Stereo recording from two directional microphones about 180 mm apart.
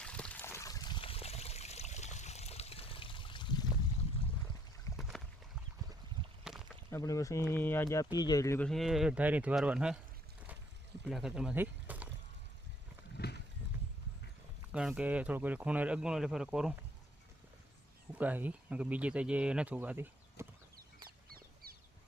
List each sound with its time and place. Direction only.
0.0 s trickle: 5° left (ahead or behind); by 3.7 s 25° left (ahead or behind)
4.9 s boat: centre (ahead or behind)
6.4 s a sound: 5° right (ahead or behind)
6.9 s speech: 20° left (ahead or behind); by 10.0 s 5° right (ahead or behind)
11.0 s a sound: 5° right (ahead or behind)
13.2 s horse: 60° left (ahead or behind)
14.7 s speech: 5° right (ahead or behind)
18.1 s speech: 10° right (ahead or behind)
21.3 s a sound: 55° right (ahead or behind)